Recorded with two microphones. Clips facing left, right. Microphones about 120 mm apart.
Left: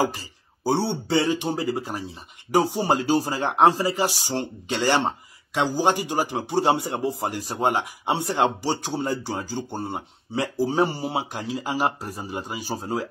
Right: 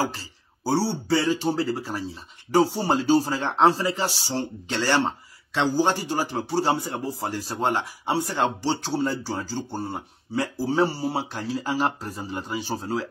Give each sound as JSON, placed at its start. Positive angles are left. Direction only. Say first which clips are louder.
{"t": 0.0, "sound": "speech", "louder": "left 3 dB", "side_deg": 15}